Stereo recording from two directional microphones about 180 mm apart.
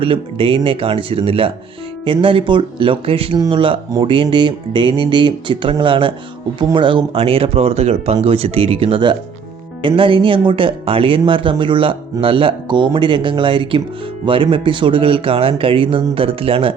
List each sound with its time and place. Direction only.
0.0 s speech: 30° right (ahead or behind)